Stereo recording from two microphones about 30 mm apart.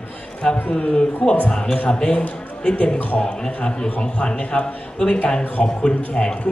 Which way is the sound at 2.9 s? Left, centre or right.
Left.